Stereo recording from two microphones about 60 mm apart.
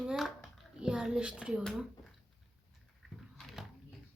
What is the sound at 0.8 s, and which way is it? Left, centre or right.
Speech, centre.